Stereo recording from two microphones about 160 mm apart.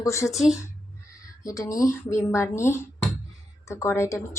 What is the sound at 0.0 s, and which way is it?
Speech, 15° left (ahead or behind).